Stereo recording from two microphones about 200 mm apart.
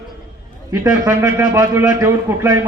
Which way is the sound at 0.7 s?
15° right (ahead or behind).